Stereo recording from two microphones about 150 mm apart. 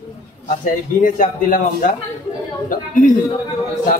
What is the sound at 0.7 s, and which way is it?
A man's voice, 65° left (ahead or behind).